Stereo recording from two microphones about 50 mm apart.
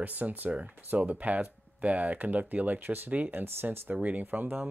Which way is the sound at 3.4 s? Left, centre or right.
Right.